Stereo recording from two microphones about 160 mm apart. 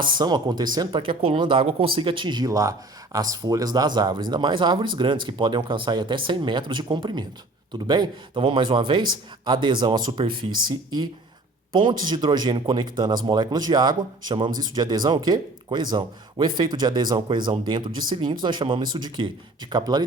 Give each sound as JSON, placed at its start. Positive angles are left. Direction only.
{"t": 0.2, "sound": "speech", "side_deg": -25}
{"t": 11.7, "sound": "speech", "side_deg": -30}